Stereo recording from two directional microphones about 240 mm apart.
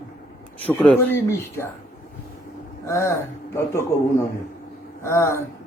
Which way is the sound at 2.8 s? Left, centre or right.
Centre.